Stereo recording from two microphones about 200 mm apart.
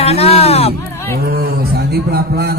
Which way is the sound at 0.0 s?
30° left (ahead or behind).